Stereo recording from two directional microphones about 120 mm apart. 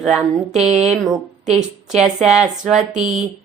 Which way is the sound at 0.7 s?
60° right (ahead or behind).